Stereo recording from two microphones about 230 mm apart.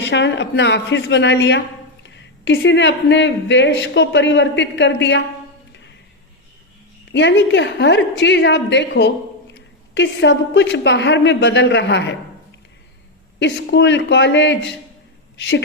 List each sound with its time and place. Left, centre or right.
0.0 s a woman's voice: left
7.1 s a woman's voice: left
13.4 s a woman's voice: left